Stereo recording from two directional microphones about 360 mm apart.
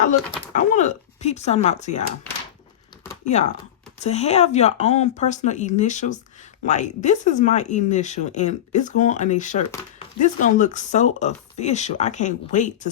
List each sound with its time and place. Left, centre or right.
0.0 s speech: left
3.3 s speech: centre